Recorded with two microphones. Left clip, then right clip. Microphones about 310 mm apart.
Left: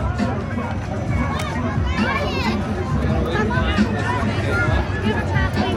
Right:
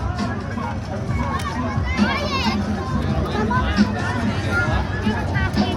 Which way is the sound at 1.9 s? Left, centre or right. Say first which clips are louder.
Even; right.